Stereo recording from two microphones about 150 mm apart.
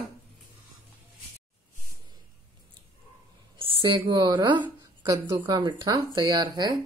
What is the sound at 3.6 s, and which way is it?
A woman's voice, 35° right (ahead or behind).